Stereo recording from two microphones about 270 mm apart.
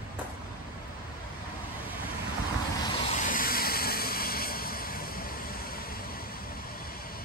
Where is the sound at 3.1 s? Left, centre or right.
Left.